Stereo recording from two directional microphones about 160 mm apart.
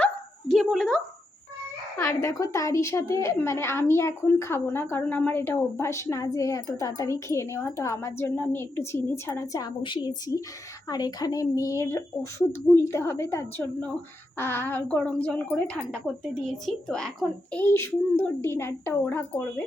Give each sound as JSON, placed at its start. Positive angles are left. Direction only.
{"t": 0.0, "sound": "dog", "side_deg": 5}
{"t": 2.0, "sound": "a woman's voice", "side_deg": 20}